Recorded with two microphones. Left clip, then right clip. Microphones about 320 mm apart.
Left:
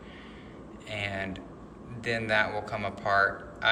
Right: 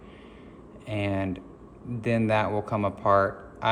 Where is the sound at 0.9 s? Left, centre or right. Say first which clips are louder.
Right 4 dB; centre.